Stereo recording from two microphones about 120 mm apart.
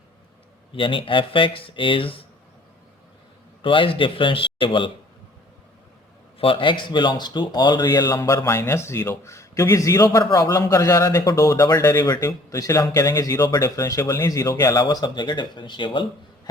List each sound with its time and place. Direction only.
0.7 s speech: 45° left (ahead or behind)
3.6 s speech: 45° left (ahead or behind)
6.4 s speech: 45° left (ahead or behind)